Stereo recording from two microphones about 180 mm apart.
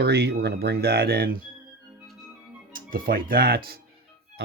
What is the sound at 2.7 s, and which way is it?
Speech, 50° right (ahead or behind).